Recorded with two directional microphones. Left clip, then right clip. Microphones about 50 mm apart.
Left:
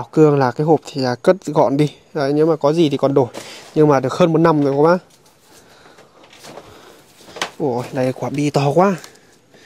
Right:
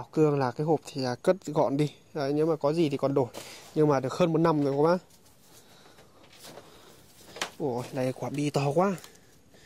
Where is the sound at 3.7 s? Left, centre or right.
Centre.